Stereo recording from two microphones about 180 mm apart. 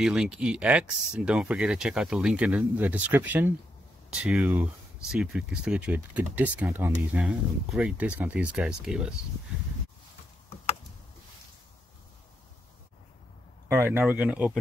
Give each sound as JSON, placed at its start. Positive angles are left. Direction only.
{"t": 0.0, "sound": "speech", "side_deg": -5}
{"t": 13.7, "sound": "speech", "side_deg": -15}